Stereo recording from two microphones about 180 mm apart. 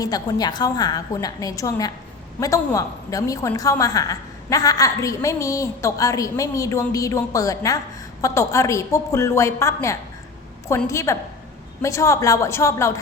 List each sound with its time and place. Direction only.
0.0 s a woman's voice: 20° left (ahead or behind)